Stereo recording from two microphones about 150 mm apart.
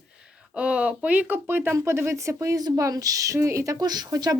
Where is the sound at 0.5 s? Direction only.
10° right (ahead or behind).